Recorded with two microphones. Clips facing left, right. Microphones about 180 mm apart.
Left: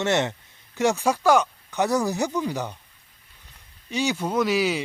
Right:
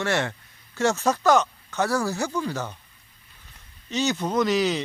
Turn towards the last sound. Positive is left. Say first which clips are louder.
# even
turn(degrees=10)  # may be behind; listen again after turning